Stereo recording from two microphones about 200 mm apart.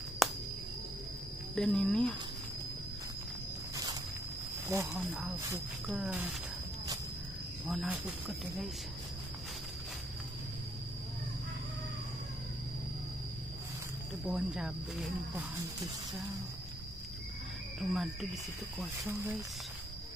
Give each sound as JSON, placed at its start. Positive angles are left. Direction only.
{"t": 0.2, "sound": "a sound", "side_deg": 0}
{"t": 1.5, "sound": "speech", "side_deg": 5}
{"t": 4.6, "sound": "speech", "side_deg": -15}
{"t": 7.6, "sound": "speech", "side_deg": -5}
{"t": 14.2, "sound": "speech", "side_deg": -5}
{"t": 17.7, "sound": "speech", "side_deg": 0}
{"t": 18.8, "sound": "speech", "side_deg": -10}